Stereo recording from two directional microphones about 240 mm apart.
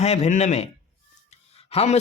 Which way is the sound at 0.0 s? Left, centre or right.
Left.